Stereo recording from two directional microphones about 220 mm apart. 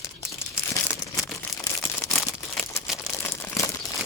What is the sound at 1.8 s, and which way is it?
Crumpling, 5° left (ahead or behind).